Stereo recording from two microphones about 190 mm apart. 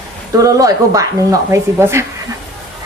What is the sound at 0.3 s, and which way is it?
A woman's voice, 20° right (ahead or behind).